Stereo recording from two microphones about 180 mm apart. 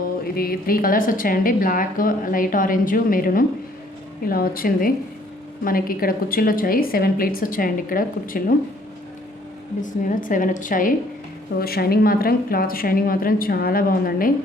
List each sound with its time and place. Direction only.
0.3 s a woman's voice: 55° left (ahead or behind)
9.8 s a woman's voice: 45° left (ahead or behind)
11.6 s a woman's voice: 60° left (ahead or behind)